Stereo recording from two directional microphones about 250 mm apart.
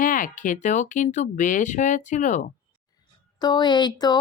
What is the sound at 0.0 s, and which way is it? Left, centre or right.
A woman's voice, left.